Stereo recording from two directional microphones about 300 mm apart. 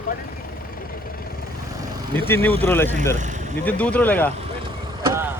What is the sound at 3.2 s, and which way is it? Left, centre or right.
Speech, right.